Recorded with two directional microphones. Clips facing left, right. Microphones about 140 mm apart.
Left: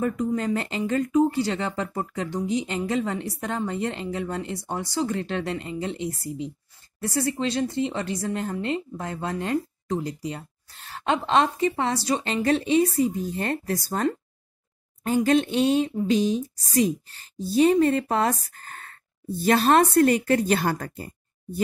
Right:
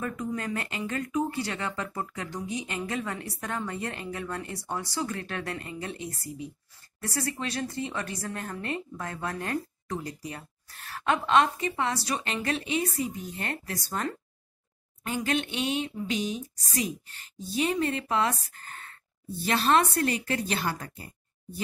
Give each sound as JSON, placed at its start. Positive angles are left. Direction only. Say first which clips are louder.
{"t": 0.0, "sound": "speech", "louder": "left 7 dB", "side_deg": 30}
{"t": 15.0, "sound": "a woman's voice", "louder": "left 9 dB", "side_deg": 40}